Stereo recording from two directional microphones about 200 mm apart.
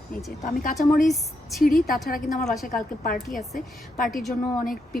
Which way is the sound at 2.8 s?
45° left (ahead or behind).